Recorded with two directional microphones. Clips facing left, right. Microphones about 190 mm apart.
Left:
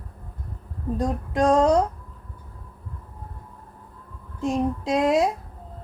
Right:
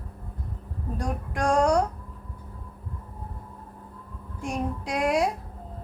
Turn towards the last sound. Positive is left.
turn(degrees=25)  # may be behind; listen again after turning